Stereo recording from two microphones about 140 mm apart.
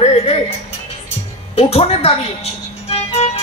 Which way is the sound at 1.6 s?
45° left (ahead or behind).